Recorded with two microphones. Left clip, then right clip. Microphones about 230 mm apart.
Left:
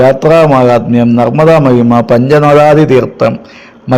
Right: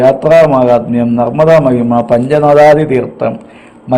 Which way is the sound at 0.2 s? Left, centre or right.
Left.